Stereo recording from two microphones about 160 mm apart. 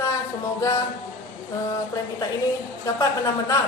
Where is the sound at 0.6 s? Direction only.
20° left (ahead or behind).